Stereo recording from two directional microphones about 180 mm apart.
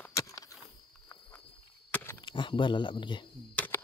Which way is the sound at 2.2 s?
25° left (ahead or behind).